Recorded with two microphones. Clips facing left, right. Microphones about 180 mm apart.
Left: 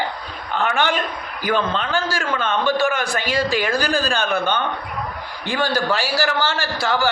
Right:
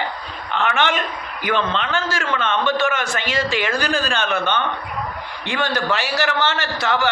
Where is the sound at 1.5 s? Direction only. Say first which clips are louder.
Left 1 dB; 10° left (ahead or behind).